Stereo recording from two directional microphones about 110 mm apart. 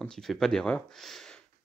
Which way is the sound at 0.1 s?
5° left (ahead or behind).